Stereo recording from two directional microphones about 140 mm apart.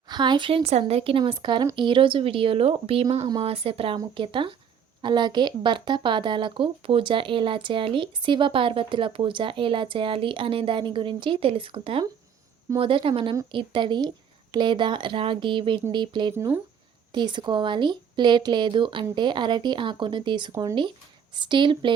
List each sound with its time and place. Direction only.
0.1 s speech: 30° right (ahead or behind)
16.3 s speech: 15° right (ahead or behind)
17.1 s speech: 35° right (ahead or behind)